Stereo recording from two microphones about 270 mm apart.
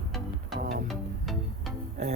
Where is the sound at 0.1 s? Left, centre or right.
Centre.